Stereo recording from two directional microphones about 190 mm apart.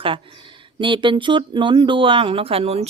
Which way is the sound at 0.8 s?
25° right (ahead or behind).